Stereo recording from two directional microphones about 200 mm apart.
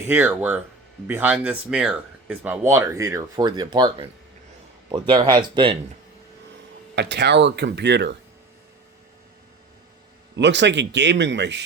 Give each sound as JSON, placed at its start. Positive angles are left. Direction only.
{"t": 0.1, "sound": "speech", "side_deg": -10}
{"t": 6.9, "sound": "speech", "side_deg": -55}
{"t": 10.3, "sound": "speech", "side_deg": -60}